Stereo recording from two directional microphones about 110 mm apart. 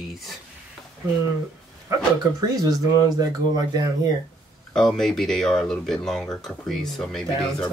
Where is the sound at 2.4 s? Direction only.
35° right (ahead or behind).